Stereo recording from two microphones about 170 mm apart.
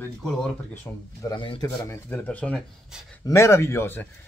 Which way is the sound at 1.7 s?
15° left (ahead or behind).